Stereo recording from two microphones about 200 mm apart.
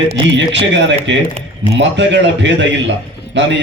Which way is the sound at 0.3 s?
60° right (ahead or behind).